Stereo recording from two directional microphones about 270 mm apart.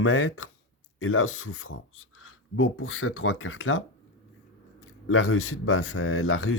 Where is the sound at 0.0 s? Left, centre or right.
Left.